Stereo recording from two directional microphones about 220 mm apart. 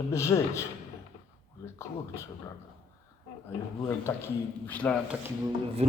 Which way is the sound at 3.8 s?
10° left (ahead or behind).